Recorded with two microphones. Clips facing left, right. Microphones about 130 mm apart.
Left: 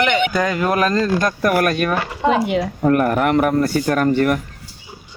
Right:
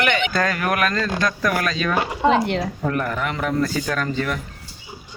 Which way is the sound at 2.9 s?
50° left (ahead or behind).